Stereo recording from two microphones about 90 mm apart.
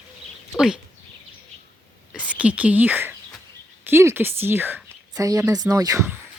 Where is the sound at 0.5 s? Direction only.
5° right (ahead or behind).